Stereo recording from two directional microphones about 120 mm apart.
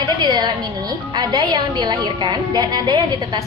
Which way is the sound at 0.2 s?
35° right (ahead or behind).